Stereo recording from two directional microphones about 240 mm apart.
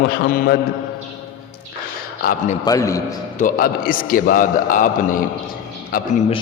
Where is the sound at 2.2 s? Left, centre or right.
Left.